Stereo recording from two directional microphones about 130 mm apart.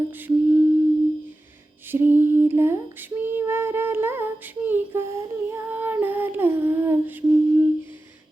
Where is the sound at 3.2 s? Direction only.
15° right (ahead or behind).